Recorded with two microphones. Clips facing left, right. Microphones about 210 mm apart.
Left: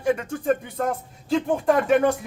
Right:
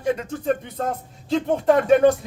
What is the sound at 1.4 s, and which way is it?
Speech, 25° right (ahead or behind).